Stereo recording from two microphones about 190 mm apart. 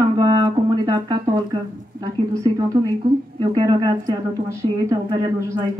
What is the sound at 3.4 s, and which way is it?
Speech, 25° right (ahead or behind).